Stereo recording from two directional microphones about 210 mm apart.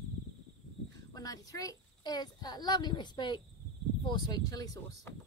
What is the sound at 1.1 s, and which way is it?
Insect, 15° left (ahead or behind).